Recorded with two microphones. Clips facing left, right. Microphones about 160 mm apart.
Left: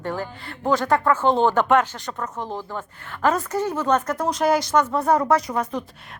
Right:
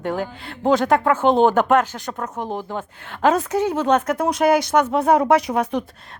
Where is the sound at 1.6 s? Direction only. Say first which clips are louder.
Right 1 dB; 45° right (ahead or behind).